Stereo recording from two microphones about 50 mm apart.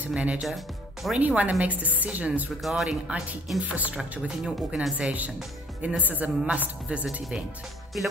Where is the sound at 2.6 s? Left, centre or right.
Centre.